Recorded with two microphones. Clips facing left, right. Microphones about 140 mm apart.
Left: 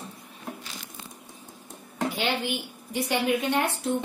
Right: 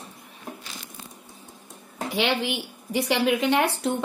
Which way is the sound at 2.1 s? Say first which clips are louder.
Right 7 dB; 90° right.